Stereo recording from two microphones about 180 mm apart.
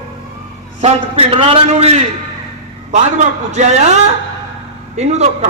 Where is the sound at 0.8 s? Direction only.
35° right (ahead or behind).